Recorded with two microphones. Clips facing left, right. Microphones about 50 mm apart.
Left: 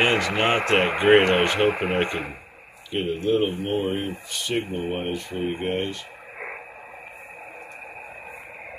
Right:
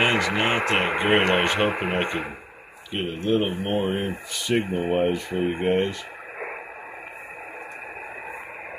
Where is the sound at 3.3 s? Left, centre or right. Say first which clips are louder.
Right 1 dB; right.